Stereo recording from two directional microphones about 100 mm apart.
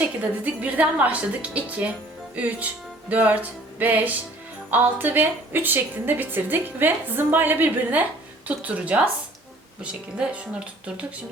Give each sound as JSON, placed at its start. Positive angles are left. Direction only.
{"t": 0.0, "sound": "a woman's voice", "side_deg": -15}